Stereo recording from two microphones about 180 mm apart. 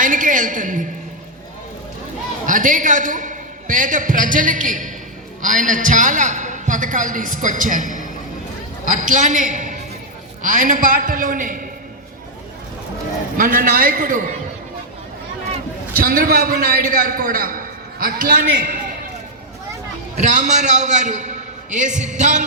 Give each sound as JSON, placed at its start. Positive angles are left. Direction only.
{"t": 0.0, "sound": "a woman's voice", "side_deg": -45}
{"t": 2.5, "sound": "a man's voice", "side_deg": -45}
{"t": 13.3, "sound": "a man's voice", "side_deg": -50}
{"t": 15.9, "sound": "a man's voice", "side_deg": -50}
{"t": 20.1, "sound": "a man's voice", "side_deg": -45}